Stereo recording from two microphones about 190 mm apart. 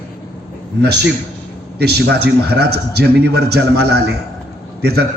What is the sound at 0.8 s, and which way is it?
A man's voice, 60° right (ahead or behind).